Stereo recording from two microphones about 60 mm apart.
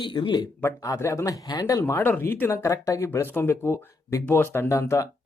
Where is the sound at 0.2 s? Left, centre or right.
Left.